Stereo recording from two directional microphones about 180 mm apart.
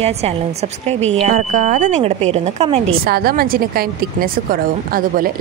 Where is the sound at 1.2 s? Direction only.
45° right (ahead or behind).